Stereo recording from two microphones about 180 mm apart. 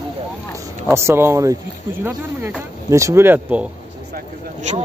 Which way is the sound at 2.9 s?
15° right (ahead or behind).